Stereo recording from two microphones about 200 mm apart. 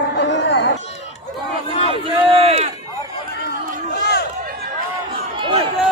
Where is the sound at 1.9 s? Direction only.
30° right (ahead or behind).